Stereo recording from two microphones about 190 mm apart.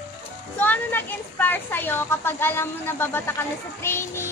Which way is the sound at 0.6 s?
10° left (ahead or behind).